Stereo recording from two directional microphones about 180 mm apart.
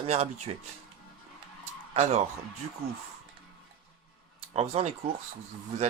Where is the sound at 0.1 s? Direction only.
35° right (ahead or behind).